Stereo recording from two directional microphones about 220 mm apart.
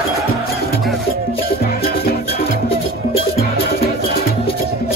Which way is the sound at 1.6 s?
45° left (ahead or behind).